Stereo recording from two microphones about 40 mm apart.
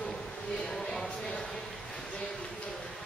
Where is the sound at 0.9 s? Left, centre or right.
Centre.